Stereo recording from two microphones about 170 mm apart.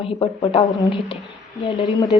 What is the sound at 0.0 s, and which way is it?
Speech, 30° left (ahead or behind).